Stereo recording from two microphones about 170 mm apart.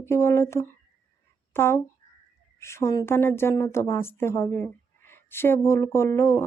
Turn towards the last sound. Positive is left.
turn(degrees=15)  # may be behind; listen again after turning